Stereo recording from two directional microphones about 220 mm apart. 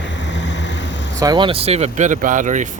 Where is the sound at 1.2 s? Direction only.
20° right (ahead or behind).